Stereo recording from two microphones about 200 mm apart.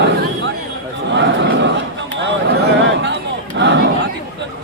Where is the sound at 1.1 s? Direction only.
60° right (ahead or behind).